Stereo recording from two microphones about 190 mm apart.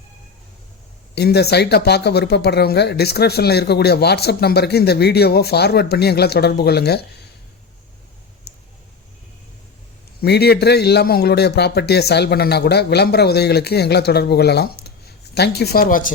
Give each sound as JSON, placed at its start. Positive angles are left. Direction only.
{"t": 1.1, "sound": "speech", "side_deg": 60}
{"t": 10.2, "sound": "speech", "side_deg": 60}